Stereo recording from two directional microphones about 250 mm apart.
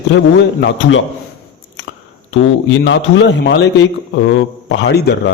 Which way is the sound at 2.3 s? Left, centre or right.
Left.